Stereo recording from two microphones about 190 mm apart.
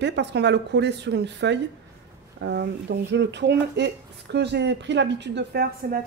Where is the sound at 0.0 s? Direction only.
65° right (ahead or behind).